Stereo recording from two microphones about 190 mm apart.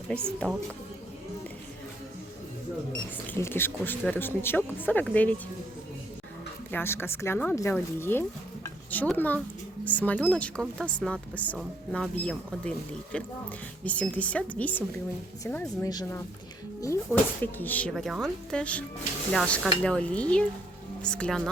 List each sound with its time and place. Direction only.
0.1 s speech: 5° left (ahead or behind)
3.3 s speech: 10° left (ahead or behind)
6.7 s speech: 10° left (ahead or behind)
15.9 s speech: 20° left (ahead or behind); by 21.5 s 5° left (ahead or behind)